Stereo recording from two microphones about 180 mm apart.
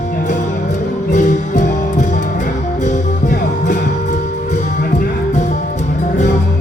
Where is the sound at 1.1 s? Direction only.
45° left (ahead or behind).